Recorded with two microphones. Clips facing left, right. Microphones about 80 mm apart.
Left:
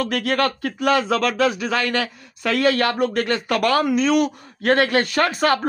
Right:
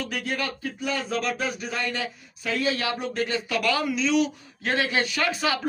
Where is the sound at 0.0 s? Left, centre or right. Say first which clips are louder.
Left 9 dB; left.